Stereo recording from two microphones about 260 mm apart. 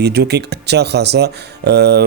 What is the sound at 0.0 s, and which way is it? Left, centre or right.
Speech, right.